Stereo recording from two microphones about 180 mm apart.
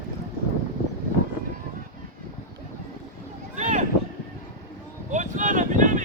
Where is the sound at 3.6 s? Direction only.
40° right (ahead or behind).